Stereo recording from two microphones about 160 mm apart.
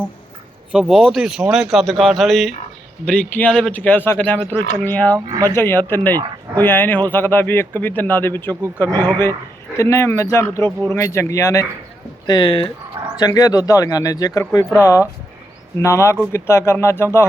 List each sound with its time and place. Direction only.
0.7 s a man's voice: 5° right (ahead or behind); by 11.6 s 20° left (ahead or behind)
12.2 s a man's voice: 30° left (ahead or behind)